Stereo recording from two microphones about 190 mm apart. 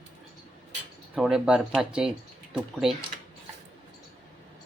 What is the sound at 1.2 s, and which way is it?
Speech, centre (ahead or behind).